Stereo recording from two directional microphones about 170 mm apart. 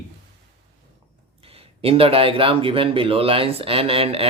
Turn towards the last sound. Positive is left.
turn(degrees=-35)  # may be behind; listen again after turning